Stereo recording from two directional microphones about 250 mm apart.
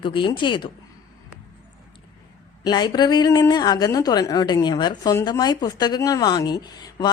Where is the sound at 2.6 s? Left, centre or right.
Centre.